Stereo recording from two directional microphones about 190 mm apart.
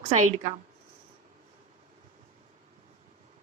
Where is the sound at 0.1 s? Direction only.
35° right (ahead or behind).